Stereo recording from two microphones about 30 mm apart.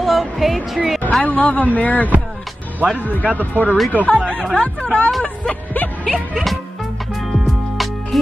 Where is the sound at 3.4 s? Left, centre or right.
Left.